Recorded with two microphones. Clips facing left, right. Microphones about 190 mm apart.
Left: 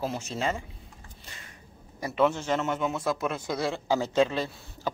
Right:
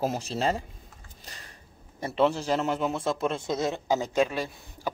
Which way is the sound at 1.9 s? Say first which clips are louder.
Right 1 dB; 30° right (ahead or behind).